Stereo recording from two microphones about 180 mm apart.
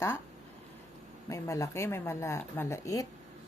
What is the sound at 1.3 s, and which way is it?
Speech, 20° left (ahead or behind).